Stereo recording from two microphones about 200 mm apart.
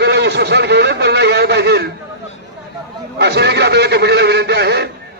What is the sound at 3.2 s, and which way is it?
Speech, 55° right (ahead or behind).